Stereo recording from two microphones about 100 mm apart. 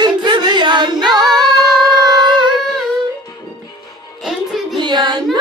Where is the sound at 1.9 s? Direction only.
40° right (ahead or behind).